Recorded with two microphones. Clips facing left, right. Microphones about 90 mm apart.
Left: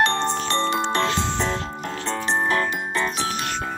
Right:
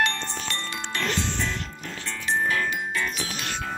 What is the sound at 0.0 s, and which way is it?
Music, 30° left (ahead or behind).